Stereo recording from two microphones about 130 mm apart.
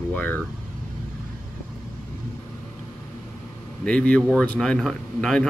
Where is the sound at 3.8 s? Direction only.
10° left (ahead or behind).